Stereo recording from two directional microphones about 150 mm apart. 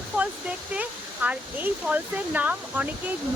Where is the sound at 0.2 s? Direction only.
10° right (ahead or behind).